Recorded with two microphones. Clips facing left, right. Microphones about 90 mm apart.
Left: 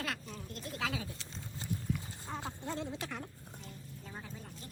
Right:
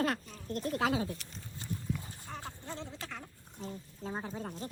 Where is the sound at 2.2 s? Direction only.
20° left (ahead or behind).